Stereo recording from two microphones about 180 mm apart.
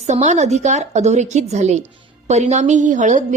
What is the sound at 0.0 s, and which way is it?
A woman's voice, 40° right (ahead or behind).